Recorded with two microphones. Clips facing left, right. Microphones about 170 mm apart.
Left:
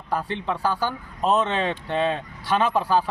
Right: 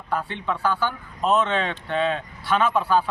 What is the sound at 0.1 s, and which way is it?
Speech, 35° left (ahead or behind).